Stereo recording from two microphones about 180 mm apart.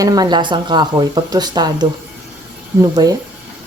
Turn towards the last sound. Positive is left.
turn(degrees=-20)  # may be behind; listen again after turning